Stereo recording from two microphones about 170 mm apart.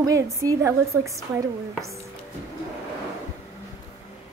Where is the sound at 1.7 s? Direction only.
Centre (ahead or behind).